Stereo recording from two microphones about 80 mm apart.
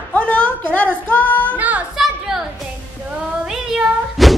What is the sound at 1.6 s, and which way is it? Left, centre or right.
Speech, centre.